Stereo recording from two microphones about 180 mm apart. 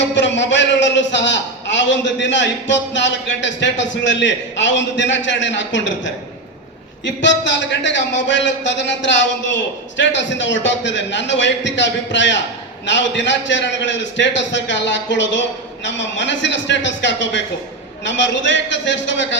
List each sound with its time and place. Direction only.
0.0 s a man's voice: 80° left